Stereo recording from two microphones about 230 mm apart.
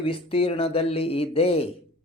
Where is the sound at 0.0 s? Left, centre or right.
Left.